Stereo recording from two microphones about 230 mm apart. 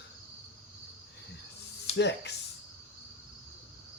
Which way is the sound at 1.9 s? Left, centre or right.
Left.